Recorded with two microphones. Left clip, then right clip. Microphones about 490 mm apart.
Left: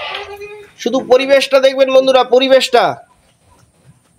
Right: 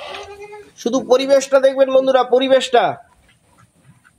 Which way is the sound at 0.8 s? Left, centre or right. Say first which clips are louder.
Left 4 dB; right.